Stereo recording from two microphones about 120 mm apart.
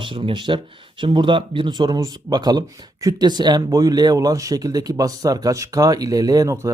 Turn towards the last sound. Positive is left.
turn(degrees=-25)  # may be behind; listen again after turning